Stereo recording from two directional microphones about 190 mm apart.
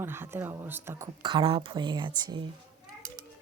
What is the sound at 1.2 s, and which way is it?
Speech, 30° right (ahead or behind).